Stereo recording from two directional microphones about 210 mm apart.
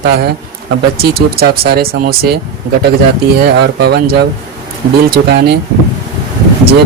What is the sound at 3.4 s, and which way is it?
Speech, 50° right (ahead or behind).